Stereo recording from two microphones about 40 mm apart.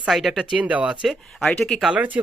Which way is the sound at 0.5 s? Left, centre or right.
Right.